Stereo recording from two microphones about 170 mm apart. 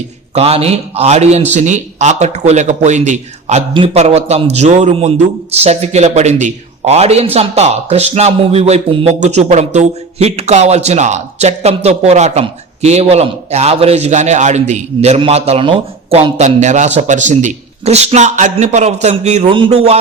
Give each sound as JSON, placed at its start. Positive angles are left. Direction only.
{"t": 0.3, "sound": "a man's voice", "side_deg": -35}